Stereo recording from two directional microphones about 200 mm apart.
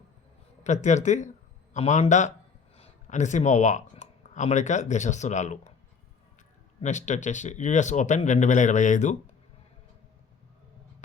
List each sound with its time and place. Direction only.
0.6 s speech: 35° left (ahead or behind)
6.8 s speech: 35° left (ahead or behind)